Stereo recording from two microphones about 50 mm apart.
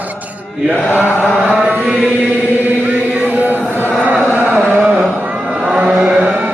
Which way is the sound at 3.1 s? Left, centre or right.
Right.